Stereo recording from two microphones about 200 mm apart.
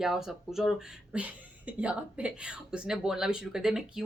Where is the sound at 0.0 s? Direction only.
Centre (ahead or behind).